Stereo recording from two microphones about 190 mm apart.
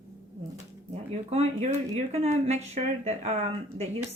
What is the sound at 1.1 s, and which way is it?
Speech, 35° right (ahead or behind).